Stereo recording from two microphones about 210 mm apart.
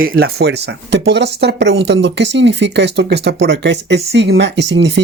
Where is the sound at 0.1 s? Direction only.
50° right (ahead or behind).